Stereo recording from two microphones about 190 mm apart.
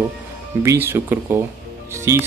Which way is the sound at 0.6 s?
15° right (ahead or behind).